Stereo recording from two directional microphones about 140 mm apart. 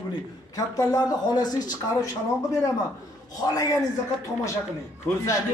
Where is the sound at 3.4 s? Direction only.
25° left (ahead or behind).